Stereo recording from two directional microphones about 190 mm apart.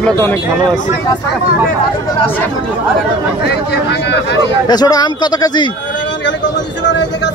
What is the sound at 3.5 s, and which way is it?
Speech, 60° left (ahead or behind).